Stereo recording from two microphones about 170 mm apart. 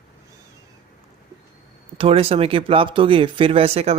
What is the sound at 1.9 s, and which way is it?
Speech, 35° right (ahead or behind).